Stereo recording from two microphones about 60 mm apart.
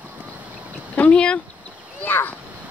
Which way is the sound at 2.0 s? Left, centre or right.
Left.